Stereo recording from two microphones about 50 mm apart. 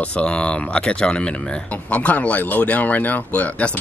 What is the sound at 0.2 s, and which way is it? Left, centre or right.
Speech, centre.